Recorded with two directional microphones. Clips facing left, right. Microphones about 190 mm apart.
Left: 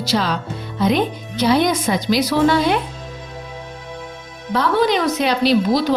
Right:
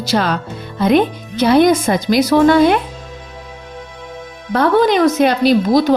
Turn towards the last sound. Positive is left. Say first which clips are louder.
# right 4 dB
turn(degrees=-45)  # may be behind; listen again after turning